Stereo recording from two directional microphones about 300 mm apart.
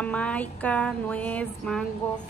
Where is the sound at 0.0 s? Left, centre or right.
Centre.